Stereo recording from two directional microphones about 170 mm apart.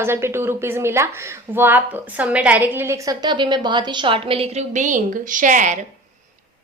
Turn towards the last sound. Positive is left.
turn(degrees=-50)  # may be behind; listen again after turning